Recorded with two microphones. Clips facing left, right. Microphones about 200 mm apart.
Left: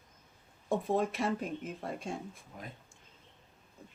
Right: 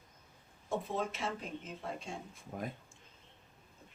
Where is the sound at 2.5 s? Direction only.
50° right (ahead or behind).